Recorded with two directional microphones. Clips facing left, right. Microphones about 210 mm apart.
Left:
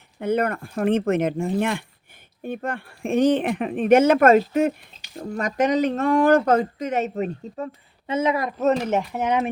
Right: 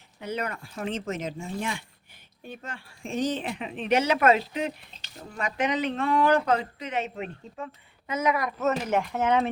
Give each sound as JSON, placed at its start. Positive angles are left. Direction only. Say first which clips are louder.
{"t": 0.2, "sound": "speech", "louder": "left 10 dB", "side_deg": 55}
{"t": 8.0, "sound": "speech", "louder": "left 4 dB", "side_deg": 30}
{"t": 9.0, "sound": "speech", "louder": "left 1 dB", "side_deg": 15}